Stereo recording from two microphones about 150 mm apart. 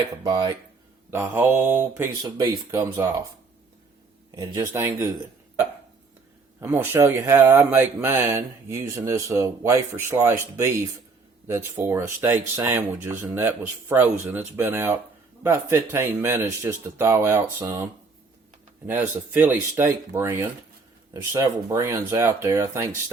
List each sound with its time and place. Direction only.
0.3 s speech: 30° right (ahead or behind)
1.1 s speech: 15° right (ahead or behind)
4.7 s speech: 15° right (ahead or behind)
6.6 s speech: 15° right (ahead or behind)
18.9 s speech: 10° right (ahead or behind)